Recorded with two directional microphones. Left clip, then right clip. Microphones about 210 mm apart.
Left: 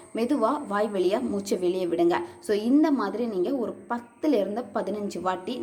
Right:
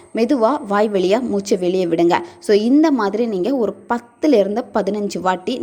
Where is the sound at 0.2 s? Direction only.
30° right (ahead or behind).